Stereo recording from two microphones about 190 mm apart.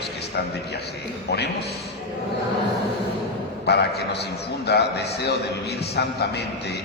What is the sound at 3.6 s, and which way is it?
A man's voice, 60° left (ahead or behind).